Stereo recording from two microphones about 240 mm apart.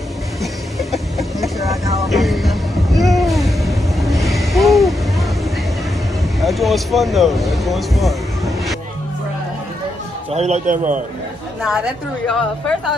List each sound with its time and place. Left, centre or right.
0.4 s vehicle: centre
1.6 s vehicle: centre
2.0 s music: centre
6.4 s a sound: centre
10.3 s a man's voice: right
12.3 s a woman's voice: centre